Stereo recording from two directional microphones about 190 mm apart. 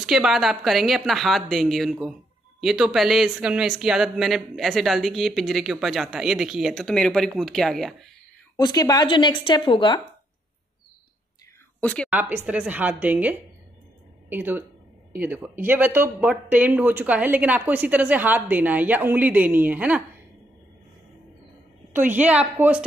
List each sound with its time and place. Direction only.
0.0 s speech: 5° right (ahead or behind)
8.5 s speech: 20° left (ahead or behind)
11.8 s speech: 5° left (ahead or behind)
12.1 s speech: 10° right (ahead or behind)
21.9 s speech: 10° right (ahead or behind)